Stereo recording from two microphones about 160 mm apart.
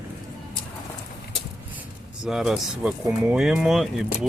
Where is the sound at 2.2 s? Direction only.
Centre (ahead or behind).